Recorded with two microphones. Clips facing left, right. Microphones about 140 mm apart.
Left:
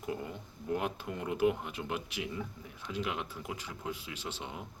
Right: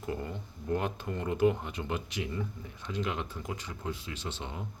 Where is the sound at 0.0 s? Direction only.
5° left (ahead or behind).